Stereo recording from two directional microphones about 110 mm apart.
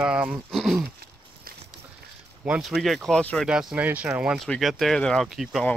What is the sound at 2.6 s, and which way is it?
Speech, centre (ahead or behind).